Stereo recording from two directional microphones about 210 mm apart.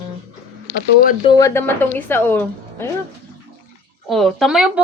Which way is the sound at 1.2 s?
15° left (ahead or behind).